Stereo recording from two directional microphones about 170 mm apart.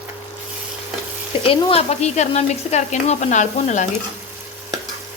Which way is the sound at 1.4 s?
35° left (ahead or behind).